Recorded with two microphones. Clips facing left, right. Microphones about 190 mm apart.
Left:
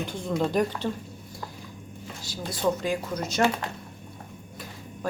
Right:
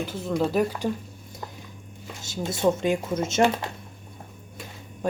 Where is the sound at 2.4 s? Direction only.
25° right (ahead or behind).